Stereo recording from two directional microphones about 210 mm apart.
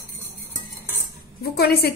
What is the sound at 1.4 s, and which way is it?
Speech, 50° left (ahead or behind).